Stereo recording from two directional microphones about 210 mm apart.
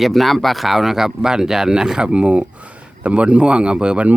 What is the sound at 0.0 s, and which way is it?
Speech, centre (ahead or behind).